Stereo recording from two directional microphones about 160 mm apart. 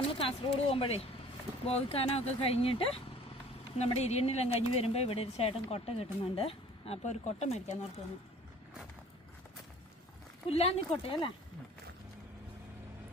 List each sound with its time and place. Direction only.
0.1 s speech: 35° left (ahead or behind)
10.4 s speech: 40° left (ahead or behind)